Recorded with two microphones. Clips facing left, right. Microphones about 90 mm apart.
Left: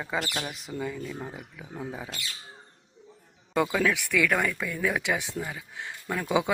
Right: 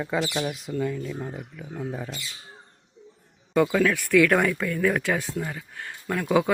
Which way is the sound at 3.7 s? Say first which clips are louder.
Right 3 dB; 10° left (ahead or behind).